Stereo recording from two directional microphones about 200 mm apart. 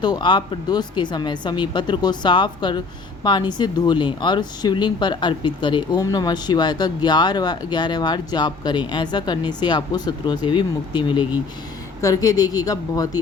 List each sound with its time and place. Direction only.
0.0 s speech: 20° left (ahead or behind)